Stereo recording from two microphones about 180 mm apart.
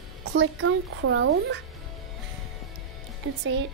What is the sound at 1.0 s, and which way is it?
Speech, 90° right.